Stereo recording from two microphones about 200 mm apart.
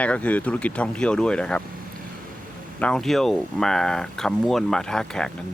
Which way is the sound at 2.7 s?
5° left (ahead or behind).